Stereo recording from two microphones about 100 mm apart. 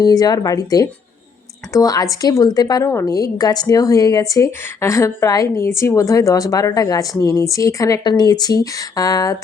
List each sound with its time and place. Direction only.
0.0 s a woman's voice: 40° left (ahead or behind)
8.0 s a woman's voice: 45° left (ahead or behind)